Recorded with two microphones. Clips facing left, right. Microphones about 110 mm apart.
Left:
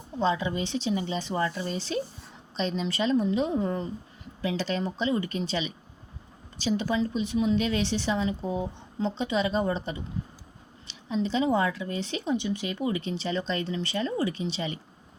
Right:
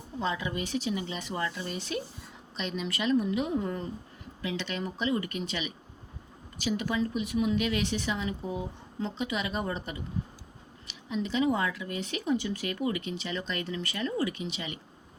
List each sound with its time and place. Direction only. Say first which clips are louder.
0.2 s speech: left 5 dB; 25° left (ahead or behind)